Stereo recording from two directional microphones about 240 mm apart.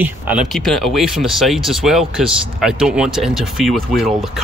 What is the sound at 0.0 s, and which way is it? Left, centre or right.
Speech, centre.